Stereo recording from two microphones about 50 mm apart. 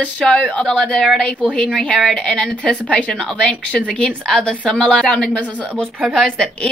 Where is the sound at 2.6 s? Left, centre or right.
Left.